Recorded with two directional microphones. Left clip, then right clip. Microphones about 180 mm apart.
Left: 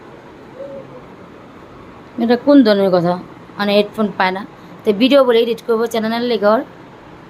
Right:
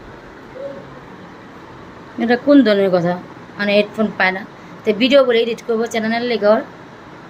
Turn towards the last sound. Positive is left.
turn(degrees=25)  # may be behind; listen again after turning